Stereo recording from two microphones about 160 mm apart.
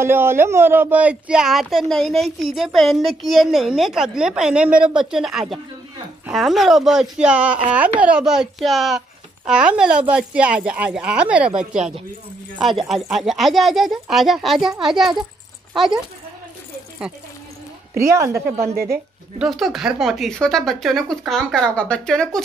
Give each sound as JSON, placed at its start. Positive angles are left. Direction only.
{"t": 0.0, "sound": "speech", "side_deg": -15}
{"t": 17.9, "sound": "speech", "side_deg": -20}
{"t": 18.6, "sound": "a woman's voice", "side_deg": -70}
{"t": 19.3, "sound": "speech", "side_deg": 0}